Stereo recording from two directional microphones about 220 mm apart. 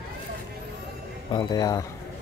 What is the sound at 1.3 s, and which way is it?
Speech, 20° left (ahead or behind).